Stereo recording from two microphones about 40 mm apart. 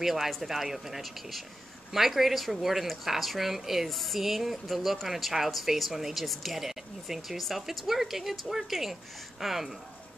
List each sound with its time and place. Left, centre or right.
0.0 s speech: centre